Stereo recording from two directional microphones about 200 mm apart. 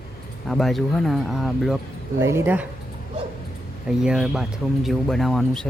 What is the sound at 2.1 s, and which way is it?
Speech, 15° right (ahead or behind).